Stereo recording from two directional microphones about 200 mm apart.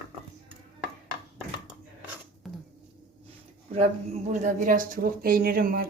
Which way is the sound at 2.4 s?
Centre (ahead or behind).